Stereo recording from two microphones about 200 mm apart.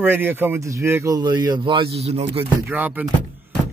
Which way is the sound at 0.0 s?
10° right (ahead or behind).